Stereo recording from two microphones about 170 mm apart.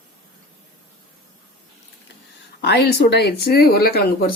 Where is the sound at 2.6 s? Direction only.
85° left; by 4.3 s 65° left (ahead or behind).